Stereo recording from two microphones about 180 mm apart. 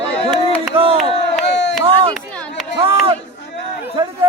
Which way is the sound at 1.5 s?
70° left (ahead or behind).